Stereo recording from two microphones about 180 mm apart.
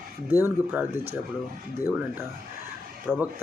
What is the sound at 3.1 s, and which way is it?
Speech, 10° right (ahead or behind).